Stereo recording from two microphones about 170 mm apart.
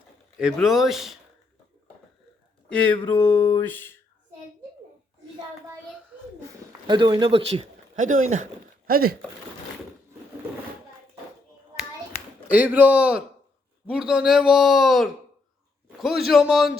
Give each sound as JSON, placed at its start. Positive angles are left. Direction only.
{"t": 0.3, "sound": "speech", "side_deg": -5}
{"t": 2.6, "sound": "speech", "side_deg": 10}
{"t": 3.2, "sound": "a sound", "side_deg": 10}
{"t": 6.8, "sound": "speech", "side_deg": -25}
{"t": 8.9, "sound": "speech", "side_deg": -60}
{"t": 12.5, "sound": "a man's voice", "side_deg": -10}